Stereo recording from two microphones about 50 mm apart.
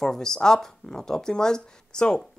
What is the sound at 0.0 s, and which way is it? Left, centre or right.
Speech, centre.